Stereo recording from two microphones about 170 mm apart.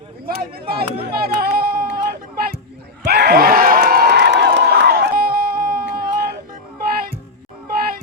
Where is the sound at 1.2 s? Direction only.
65° right (ahead or behind).